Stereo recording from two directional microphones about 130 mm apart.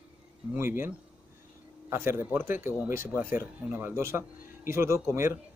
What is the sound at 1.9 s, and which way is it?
A man's voice, 20° right (ahead or behind).